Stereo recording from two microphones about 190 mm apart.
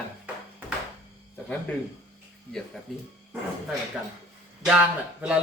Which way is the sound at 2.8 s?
Centre (ahead or behind).